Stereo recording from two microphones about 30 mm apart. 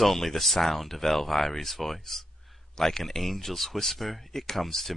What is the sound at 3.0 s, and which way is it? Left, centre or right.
Speech, centre.